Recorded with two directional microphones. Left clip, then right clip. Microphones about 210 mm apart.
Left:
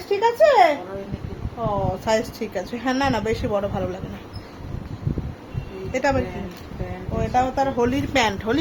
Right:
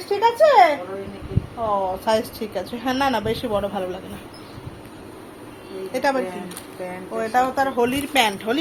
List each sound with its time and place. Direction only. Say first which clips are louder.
0.1 s a sound: right 1 dB; 20° left (ahead or behind)
1.6 s speech: right 2 dB; 15° left (ahead or behind)
5.9 s a woman's voice: even; 20° left (ahead or behind)